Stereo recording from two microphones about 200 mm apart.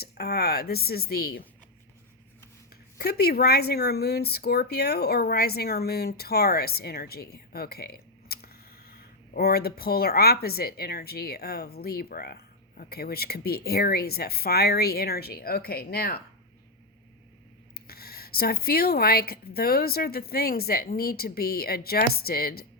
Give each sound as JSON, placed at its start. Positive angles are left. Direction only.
{"t": 0.0, "sound": "speech", "side_deg": 50}
{"t": 3.0, "sound": "speech", "side_deg": 55}
{"t": 17.7, "sound": "speech", "side_deg": 50}